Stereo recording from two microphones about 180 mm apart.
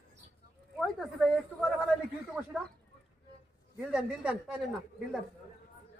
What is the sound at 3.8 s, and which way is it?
Speech, 5° right (ahead or behind).